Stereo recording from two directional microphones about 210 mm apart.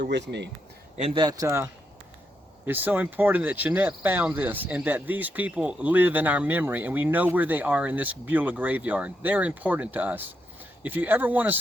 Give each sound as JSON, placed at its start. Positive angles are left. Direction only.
{"t": 0.0, "sound": "speech", "side_deg": -55}
{"t": 0.9, "sound": "speech", "side_deg": -25}